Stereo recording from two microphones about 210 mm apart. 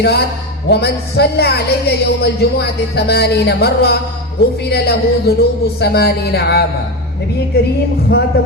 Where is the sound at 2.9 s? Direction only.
50° left (ahead or behind).